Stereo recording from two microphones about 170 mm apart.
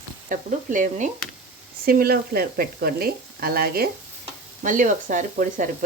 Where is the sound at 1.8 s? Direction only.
65° right (ahead or behind).